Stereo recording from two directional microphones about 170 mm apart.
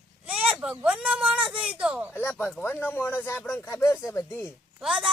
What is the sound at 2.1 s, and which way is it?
Speech, 15° left (ahead or behind).